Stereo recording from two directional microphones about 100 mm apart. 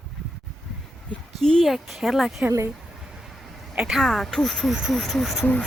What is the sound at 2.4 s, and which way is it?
Speech, 25° right (ahead or behind).